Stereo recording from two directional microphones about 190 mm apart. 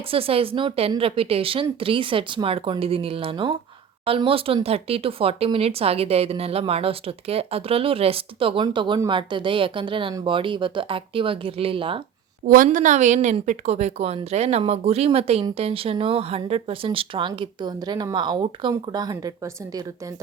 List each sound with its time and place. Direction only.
0.1 s speech: 30° right (ahead or behind)
12.5 s a woman's voice: 45° right (ahead or behind); by 19.3 s 20° right (ahead or behind)